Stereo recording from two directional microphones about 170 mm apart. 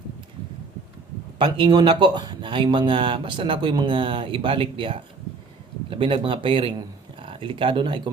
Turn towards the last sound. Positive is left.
turn(degrees=-30)  # may be behind; listen again after turning